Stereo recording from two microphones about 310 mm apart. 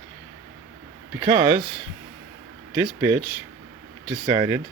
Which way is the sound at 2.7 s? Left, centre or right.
Centre.